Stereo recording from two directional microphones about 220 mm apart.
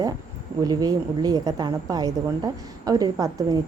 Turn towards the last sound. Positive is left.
turn(degrees=-15)  # may be behind; listen again after turning